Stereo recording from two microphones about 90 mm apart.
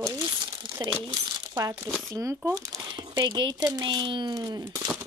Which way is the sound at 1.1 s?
40° right (ahead or behind).